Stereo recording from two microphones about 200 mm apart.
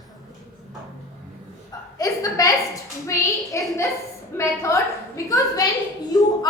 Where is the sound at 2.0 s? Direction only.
15° left (ahead or behind).